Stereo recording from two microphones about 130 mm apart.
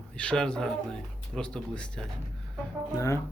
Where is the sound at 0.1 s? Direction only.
10° left (ahead or behind).